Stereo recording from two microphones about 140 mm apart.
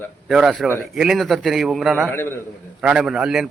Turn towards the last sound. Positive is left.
turn(degrees=-5)  # may be behind; listen again after turning